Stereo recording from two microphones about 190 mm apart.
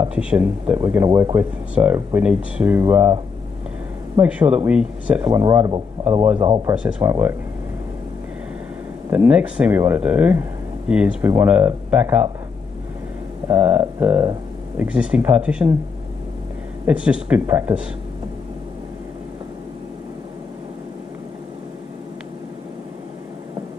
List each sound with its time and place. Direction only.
0.1 s speech: 5° right (ahead or behind)
1.8 s speech: 5° right (ahead or behind)
4.2 s speech: 5° right (ahead or behind)
6.3 s speech: 25° right (ahead or behind)
6.7 s speech: 5° right (ahead or behind)
9.1 s speech: 5° right (ahead or behind)
13.5 s speech: 10° right (ahead or behind)
16.8 s speech: 5° right (ahead or behind)